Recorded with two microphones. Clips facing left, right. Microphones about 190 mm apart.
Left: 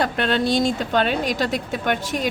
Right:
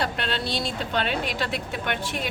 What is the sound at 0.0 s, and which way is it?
Speech, 50° left (ahead or behind).